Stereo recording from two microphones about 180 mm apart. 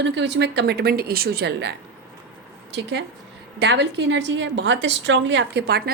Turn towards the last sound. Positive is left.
turn(degrees=-60)  # may be behind; listen again after turning